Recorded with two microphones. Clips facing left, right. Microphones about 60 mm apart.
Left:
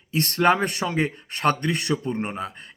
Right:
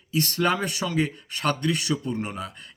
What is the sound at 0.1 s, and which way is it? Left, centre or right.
Speech, left.